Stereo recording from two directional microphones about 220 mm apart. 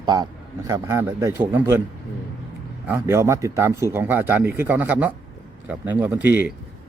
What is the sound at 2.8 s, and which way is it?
Speech, 10° right (ahead or behind).